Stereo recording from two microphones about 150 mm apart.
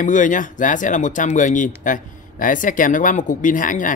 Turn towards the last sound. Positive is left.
turn(degrees=60)  # may be behind; listen again after turning